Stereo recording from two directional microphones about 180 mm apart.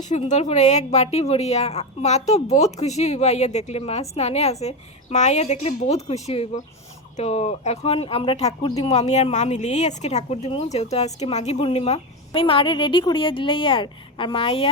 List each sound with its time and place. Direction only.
0.1 s speech: 40° left (ahead or behind)